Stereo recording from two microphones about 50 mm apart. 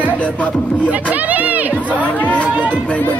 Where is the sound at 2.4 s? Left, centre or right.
Right.